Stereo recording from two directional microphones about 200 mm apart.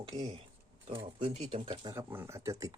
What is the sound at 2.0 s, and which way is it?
Speech, 10° right (ahead or behind).